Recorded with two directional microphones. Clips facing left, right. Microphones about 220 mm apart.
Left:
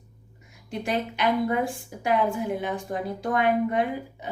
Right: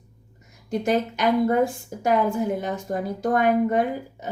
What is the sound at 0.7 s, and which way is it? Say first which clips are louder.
Speech: right 6 dB; 45° right (ahead or behind).